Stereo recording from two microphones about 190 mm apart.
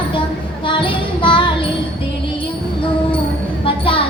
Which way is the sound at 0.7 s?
25° left (ahead or behind).